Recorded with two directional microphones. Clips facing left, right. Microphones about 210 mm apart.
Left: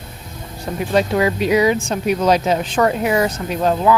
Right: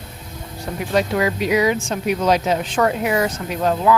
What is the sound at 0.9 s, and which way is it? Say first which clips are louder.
Speech: left 2 dB; 30° left (ahead or behind).